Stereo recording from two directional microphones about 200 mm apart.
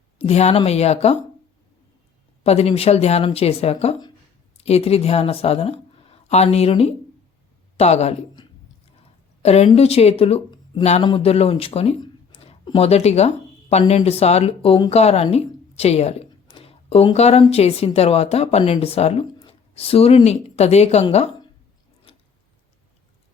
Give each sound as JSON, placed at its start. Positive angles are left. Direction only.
{"t": 0.2, "sound": "speech", "side_deg": 30}
{"t": 2.4, "sound": "a woman's voice", "side_deg": 30}
{"t": 9.4, "sound": "speech", "side_deg": 30}